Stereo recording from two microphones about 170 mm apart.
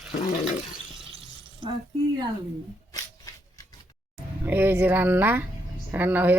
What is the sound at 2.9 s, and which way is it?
Shuffling cards, 20° left (ahead or behind).